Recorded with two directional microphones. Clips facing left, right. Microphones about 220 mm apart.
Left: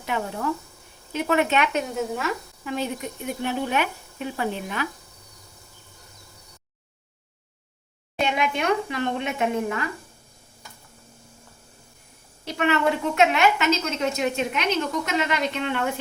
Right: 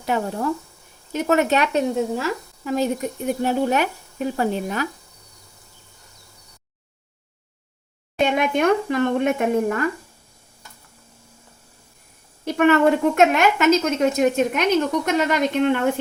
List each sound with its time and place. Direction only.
0.0 s speech: 35° right (ahead or behind)
8.2 s a woman's voice: 45° right (ahead or behind)
12.5 s a woman's voice: 50° right (ahead or behind)